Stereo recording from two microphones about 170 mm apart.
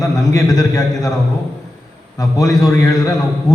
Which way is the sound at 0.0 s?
20° left (ahead or behind).